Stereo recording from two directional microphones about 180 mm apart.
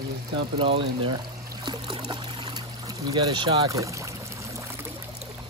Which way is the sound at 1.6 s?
25° right (ahead or behind).